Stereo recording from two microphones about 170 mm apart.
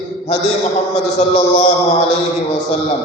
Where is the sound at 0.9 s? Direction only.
40° left (ahead or behind).